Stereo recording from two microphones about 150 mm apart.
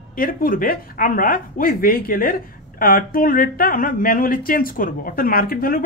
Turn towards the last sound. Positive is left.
turn(degrees=70)  # may be behind; listen again after turning